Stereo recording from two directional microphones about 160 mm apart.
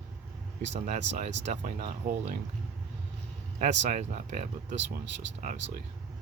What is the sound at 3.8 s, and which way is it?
Speech, 45° right (ahead or behind).